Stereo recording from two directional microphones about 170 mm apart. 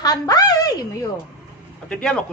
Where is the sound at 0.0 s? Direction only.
20° left (ahead or behind).